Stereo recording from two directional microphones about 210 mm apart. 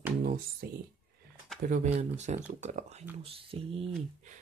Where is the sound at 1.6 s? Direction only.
35° right (ahead or behind).